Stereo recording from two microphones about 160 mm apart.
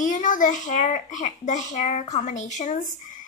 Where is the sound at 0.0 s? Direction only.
55° left (ahead or behind).